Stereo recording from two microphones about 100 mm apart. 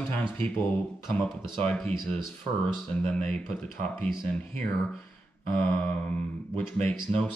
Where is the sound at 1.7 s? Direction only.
10° left (ahead or behind).